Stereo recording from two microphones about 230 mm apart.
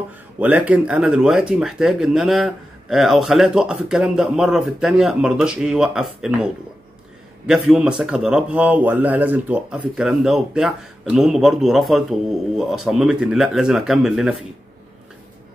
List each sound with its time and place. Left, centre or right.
0.4 s a man's voice: centre